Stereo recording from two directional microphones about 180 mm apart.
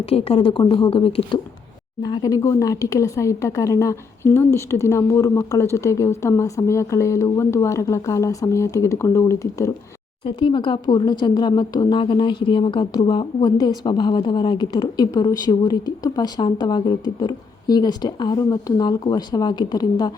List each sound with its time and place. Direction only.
0.0 s a woman's voice: 35° left (ahead or behind)